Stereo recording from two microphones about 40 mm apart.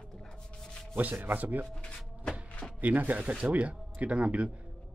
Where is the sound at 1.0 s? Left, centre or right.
Right.